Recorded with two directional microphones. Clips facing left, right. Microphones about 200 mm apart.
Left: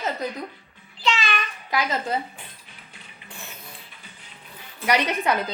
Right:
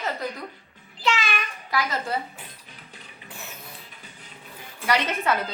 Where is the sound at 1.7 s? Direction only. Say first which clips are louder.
Left 2 dB; 20° left (ahead or behind).